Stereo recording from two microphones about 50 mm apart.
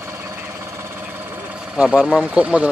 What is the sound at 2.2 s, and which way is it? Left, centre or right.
Speech, right.